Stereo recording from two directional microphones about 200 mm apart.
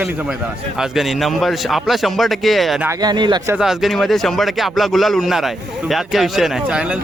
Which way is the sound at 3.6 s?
Centre (ahead or behind).